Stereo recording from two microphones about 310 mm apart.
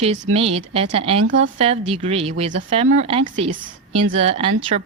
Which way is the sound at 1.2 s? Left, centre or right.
Right.